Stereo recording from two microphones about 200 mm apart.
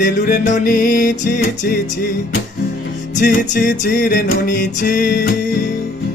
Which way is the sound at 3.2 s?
40° left (ahead or behind).